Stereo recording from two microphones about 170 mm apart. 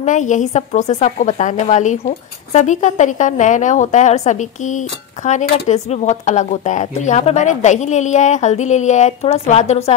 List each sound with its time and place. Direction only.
0.0 s a woman's voice: 45° left (ahead or behind)